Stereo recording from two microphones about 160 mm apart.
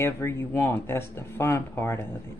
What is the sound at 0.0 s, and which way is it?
Speech, 15° left (ahead or behind).